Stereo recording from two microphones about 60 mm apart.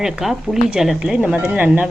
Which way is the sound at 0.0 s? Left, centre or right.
Centre.